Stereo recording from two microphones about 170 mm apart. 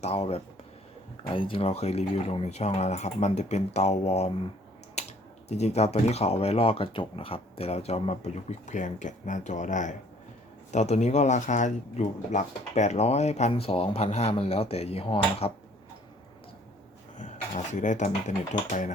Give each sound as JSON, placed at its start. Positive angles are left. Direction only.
{"t": 0.0, "sound": "speech", "side_deg": 35}
{"t": 5.0, "sound": "typing", "side_deg": 40}
{"t": 5.5, "sound": "speech", "side_deg": 40}
{"t": 17.2, "sound": "speech", "side_deg": 40}